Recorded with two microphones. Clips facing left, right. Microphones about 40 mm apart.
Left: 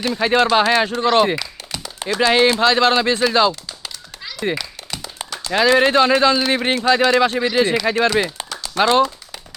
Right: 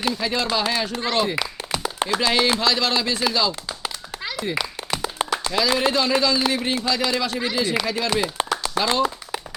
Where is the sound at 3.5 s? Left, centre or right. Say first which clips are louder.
Right 2 dB; centre.